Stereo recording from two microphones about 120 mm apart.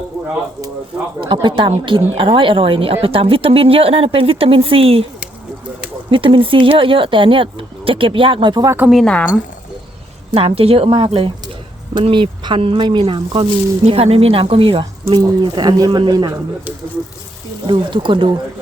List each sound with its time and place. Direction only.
1.2 s a woman's voice: 40° right (ahead or behind)
6.1 s a woman's voice: 45° right (ahead or behind)
8.6 s speech: 20° right (ahead or behind)
8.9 s speech: centre (ahead or behind)
10.3 s a woman's voice: 55° right (ahead or behind)
13.8 s a woman's voice: 55° right (ahead or behind)
15.1 s speech: 35° right (ahead or behind)
17.7 s a woman's voice: 45° right (ahead or behind)